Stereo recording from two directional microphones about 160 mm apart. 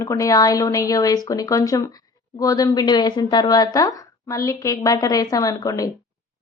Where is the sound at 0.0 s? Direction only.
20° left (ahead or behind).